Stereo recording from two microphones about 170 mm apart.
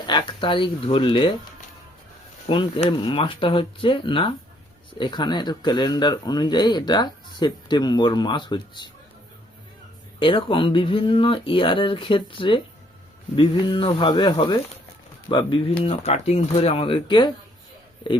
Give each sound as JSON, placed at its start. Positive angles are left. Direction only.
{"t": 0.1, "sound": "speech", "side_deg": 30}
{"t": 2.5, "sound": "speech", "side_deg": 30}
{"t": 10.2, "sound": "speech", "side_deg": 30}
{"t": 15.8, "sound": "speech", "side_deg": 35}